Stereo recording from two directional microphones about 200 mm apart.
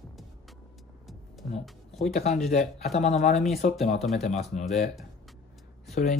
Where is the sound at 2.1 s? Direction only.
35° left (ahead or behind).